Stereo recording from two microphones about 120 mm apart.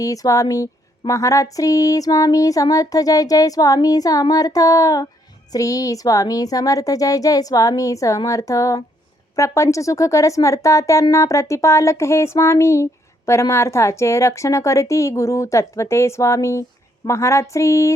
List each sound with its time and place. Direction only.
0.0 s speech: 30° left (ahead or behind)